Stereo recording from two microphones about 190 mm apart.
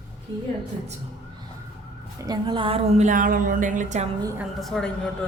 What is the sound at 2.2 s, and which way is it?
A woman's voice, 20° right (ahead or behind).